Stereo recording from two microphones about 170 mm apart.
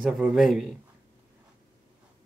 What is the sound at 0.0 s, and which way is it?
Speech, centre (ahead or behind).